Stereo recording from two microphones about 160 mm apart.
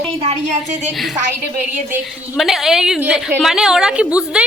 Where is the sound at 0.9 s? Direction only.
Centre (ahead or behind).